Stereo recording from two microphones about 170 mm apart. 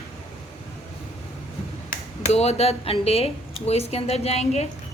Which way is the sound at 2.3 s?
40° left (ahead or behind).